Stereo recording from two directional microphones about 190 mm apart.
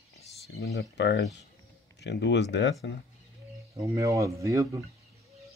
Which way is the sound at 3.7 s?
15° right (ahead or behind).